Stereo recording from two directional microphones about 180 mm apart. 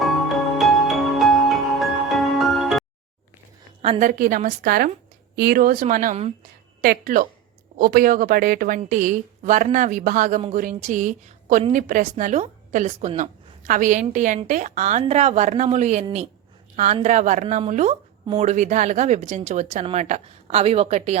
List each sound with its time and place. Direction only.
0.0 s music: centre (ahead or behind)
4.0 s a woman's voice: 50° right (ahead or behind)
6.8 s a woman's voice: 55° right (ahead or behind); by 21.2 s 35° right (ahead or behind)